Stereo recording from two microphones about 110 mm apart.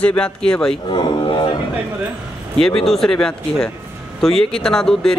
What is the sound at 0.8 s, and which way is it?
Speech, 45° left (ahead or behind).